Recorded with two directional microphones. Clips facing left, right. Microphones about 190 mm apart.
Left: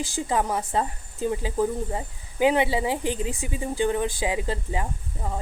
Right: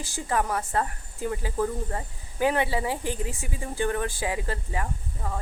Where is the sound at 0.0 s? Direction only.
15° left (ahead or behind).